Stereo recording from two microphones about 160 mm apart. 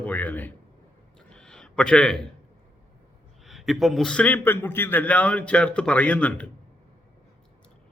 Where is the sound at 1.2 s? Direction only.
5° left (ahead or behind).